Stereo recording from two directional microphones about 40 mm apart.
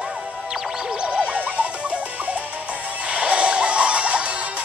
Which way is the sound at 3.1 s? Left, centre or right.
Right.